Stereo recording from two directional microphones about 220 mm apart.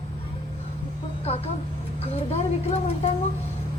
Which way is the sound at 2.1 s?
30° left (ahead or behind).